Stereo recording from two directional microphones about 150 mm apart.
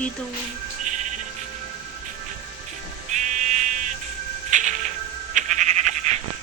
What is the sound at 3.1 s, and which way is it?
Buzzer, 55° right (ahead or behind).